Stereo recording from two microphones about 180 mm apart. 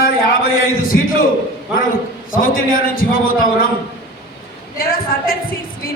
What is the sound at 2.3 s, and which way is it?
Speech, 50° left (ahead or behind).